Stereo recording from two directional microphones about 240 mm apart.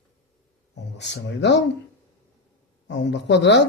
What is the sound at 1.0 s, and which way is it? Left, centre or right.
Speech, left.